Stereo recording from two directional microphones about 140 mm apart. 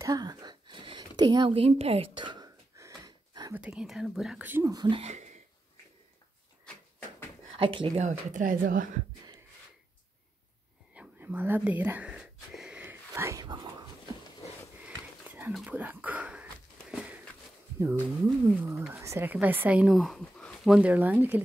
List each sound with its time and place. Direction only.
0.0 s a sound: 25° right (ahead or behind)
1.5 s speech: 45° right (ahead or behind); by 2.9 s 30° right (ahead or behind)
3.5 s speech: 5° right (ahead or behind)
4.5 s speech: 15° right (ahead or behind)
4.7 s speech: 35° right (ahead or behind)
5.1 s a sound: 55° right (ahead or behind)
7.5 s speech: 40° right (ahead or behind)
8.0 s speech: 65° right (ahead or behind)
11.0 s whispering: 10° right (ahead or behind); by 13.7 s 30° right (ahead or behind)
14.8 s sniff: 10° right (ahead or behind)
15.5 s speech: 10° right (ahead or behind)
17.7 s speech: 20° right (ahead or behind); by 20.7 s 5° left (ahead or behind)
20.7 s speech: 10° right (ahead or behind)